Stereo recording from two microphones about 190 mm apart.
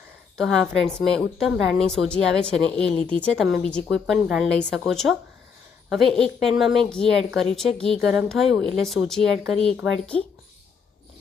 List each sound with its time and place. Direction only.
0.3 s a woman's voice: centre (ahead or behind)